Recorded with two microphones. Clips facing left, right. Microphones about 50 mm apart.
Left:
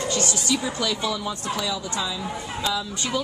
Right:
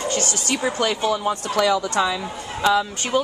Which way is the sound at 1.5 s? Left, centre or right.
Right.